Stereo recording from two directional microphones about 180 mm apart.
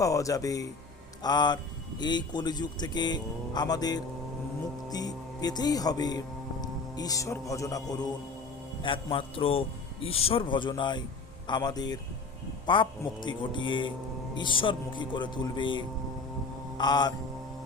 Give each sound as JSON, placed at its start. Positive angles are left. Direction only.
{"t": 0.0, "sound": "a man's voice", "side_deg": 20}
{"t": 16.7, "sound": "mantra", "side_deg": 25}